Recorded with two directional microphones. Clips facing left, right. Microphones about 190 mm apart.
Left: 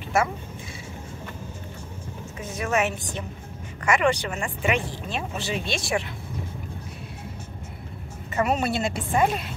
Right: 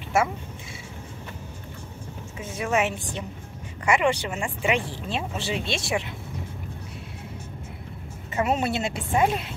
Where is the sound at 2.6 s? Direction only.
25° right (ahead or behind).